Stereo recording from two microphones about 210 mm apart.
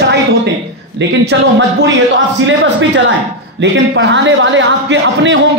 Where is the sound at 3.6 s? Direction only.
60° right (ahead or behind).